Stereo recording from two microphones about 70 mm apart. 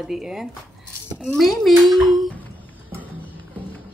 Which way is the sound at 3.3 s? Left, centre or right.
Left.